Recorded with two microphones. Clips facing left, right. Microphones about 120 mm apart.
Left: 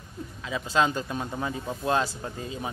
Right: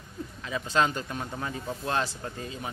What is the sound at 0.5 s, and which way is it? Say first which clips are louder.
Speech: left 1 dB; 15° left (ahead or behind).